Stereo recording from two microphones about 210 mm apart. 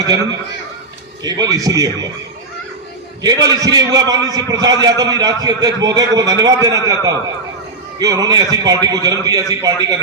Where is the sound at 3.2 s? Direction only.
20° right (ahead or behind).